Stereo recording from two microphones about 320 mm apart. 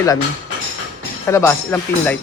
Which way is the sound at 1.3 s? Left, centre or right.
Centre.